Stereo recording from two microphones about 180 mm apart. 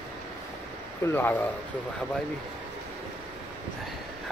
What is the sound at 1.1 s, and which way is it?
Speech, 15° left (ahead or behind).